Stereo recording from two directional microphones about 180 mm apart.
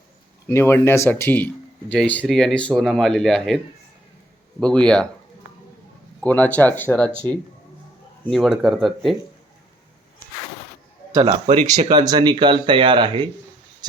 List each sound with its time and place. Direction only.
0.4 s speech: 15° left (ahead or behind)
4.6 s speech: 5° left (ahead or behind)
6.2 s speech: 10° left (ahead or behind)
8.3 s speech: centre (ahead or behind)
11.1 s a man's voice: 20° right (ahead or behind)
11.4 s speech: 40° right (ahead or behind)
11.9 s speech: 25° right (ahead or behind)